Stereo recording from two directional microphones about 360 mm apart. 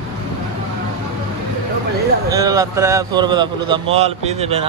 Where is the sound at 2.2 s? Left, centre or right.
Centre.